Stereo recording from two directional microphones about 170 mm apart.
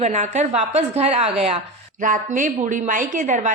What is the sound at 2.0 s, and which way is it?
A woman's voice, 50° right (ahead or behind).